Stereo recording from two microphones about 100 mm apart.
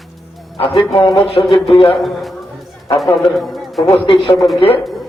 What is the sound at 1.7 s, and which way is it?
Speech, 65° left (ahead or behind).